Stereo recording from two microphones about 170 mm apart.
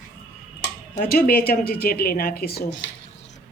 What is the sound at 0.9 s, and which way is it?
A woman's voice, 60° left (ahead or behind).